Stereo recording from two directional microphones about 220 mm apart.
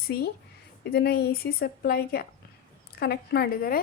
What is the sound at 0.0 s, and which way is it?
A woman's voice, 45° left (ahead or behind).